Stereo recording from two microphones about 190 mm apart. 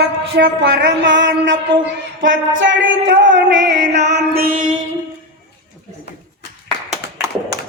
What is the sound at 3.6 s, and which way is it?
Music, 70° right (ahead or behind).